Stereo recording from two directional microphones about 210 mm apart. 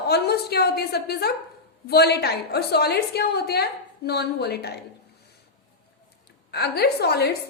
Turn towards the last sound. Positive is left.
turn(degrees=50)  # may be behind; listen again after turning